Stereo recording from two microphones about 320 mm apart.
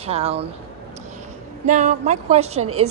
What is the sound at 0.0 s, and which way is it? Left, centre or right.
Speech, centre.